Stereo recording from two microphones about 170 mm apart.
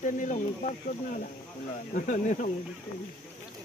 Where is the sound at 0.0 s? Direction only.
45° left (ahead or behind).